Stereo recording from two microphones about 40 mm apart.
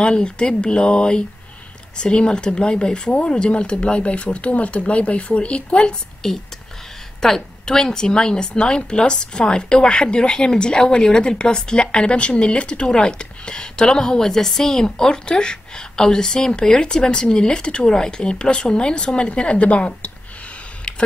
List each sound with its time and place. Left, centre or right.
0.0 s speech: left
7.2 s a woman's voice: centre; by 19.9 s left